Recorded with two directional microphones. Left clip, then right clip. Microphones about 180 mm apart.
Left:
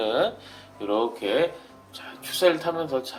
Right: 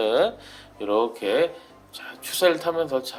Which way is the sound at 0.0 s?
35° right (ahead or behind).